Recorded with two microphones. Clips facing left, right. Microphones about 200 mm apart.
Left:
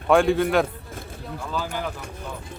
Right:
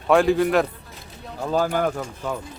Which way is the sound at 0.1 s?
Centre (ahead or behind).